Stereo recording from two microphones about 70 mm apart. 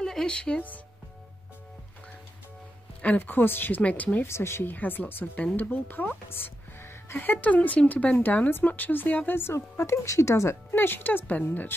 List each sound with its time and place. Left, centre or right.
0.0 s speech: centre
3.0 s a woman's voice: left
4.3 s a woman's voice: left
10.7 s a woman's voice: left